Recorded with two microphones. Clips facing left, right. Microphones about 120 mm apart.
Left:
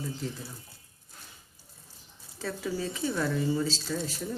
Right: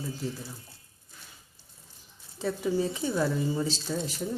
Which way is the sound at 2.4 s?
20° right (ahead or behind).